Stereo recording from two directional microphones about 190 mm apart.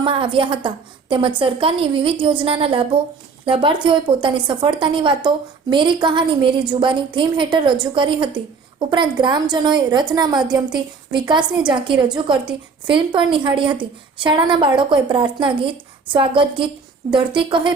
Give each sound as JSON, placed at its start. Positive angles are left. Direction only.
{"t": 0.0, "sound": "a woman's voice", "side_deg": -25}